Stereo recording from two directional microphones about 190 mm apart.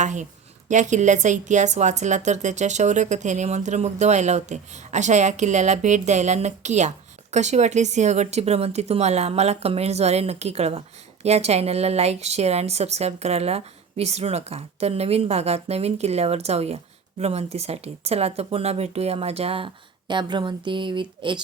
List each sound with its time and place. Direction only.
0.0 s a woman's voice: 40° right (ahead or behind); by 21.4 s 25° right (ahead or behind)